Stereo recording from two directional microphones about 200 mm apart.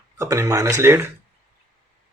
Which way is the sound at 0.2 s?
15° right (ahead or behind).